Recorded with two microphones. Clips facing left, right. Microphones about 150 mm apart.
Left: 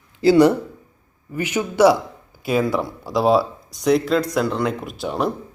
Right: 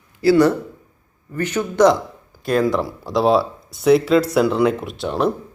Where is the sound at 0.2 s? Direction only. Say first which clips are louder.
Left 1 dB; 15° left (ahead or behind).